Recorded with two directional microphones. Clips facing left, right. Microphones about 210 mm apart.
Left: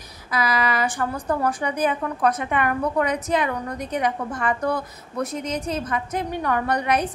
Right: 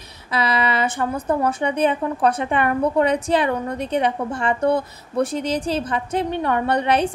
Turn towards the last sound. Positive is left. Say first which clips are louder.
# right 3 dB
turn(degrees=-30)  # may be behind; listen again after turning